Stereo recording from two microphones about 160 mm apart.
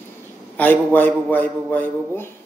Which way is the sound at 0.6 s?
10° left (ahead or behind).